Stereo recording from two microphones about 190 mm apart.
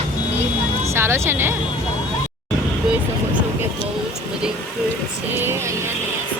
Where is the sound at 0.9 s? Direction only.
15° right (ahead or behind).